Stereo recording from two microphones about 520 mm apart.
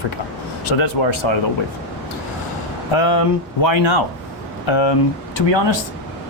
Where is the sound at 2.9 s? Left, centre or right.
Left.